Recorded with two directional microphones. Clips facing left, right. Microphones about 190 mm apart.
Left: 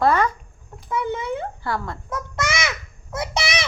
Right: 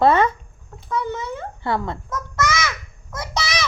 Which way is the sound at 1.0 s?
20° left (ahead or behind).